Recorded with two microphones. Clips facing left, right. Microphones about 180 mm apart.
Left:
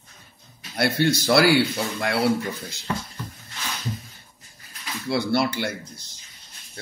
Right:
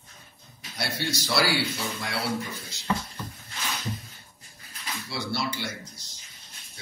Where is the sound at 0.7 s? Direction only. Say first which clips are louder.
Left 10 dB; 60° left (ahead or behind).